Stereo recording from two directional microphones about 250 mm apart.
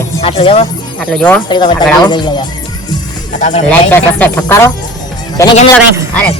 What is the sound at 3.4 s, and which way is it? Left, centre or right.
Speech, left.